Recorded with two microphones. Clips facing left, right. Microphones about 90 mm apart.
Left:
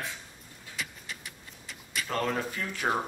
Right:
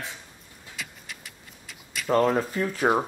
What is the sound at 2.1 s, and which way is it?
Speech, 35° right (ahead or behind).